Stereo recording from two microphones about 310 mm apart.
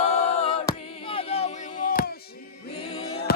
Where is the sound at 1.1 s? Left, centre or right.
Centre.